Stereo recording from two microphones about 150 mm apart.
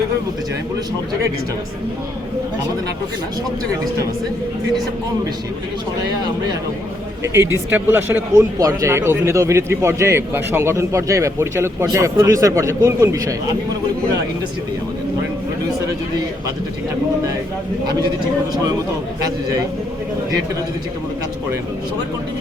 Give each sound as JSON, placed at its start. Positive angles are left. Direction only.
{"t": 7.3, "sound": "speech", "side_deg": -15}